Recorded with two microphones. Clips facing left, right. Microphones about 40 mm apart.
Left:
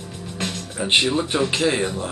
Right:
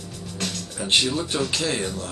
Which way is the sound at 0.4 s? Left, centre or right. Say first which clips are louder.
Left 3 dB; left.